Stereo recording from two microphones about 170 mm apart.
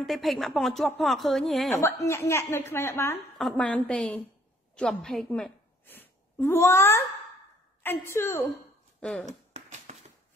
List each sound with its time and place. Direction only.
0.0 s speech: centre (ahead or behind)
1.8 s a woman's voice: 15° left (ahead or behind)
3.3 s a woman's voice: 5° left (ahead or behind)
9.2 s a sound: 45° right (ahead or behind)